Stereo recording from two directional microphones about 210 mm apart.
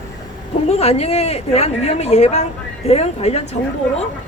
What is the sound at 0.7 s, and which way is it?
A woman's voice, 30° left (ahead or behind).